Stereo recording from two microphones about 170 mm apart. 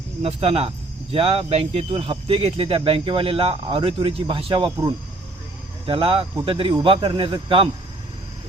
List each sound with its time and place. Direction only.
0.2 s speech: 35° right (ahead or behind)